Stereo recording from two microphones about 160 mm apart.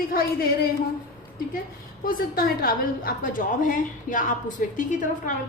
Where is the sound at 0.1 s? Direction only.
65° left (ahead or behind).